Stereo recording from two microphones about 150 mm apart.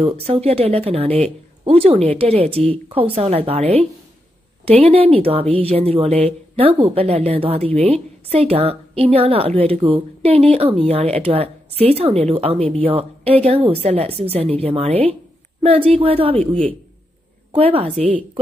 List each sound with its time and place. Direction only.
0.0 s speech: 45° right (ahead or behind)